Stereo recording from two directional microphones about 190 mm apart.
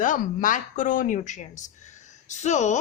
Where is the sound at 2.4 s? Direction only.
40° left (ahead or behind).